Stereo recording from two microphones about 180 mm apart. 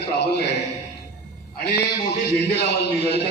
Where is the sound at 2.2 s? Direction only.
65° left (ahead or behind).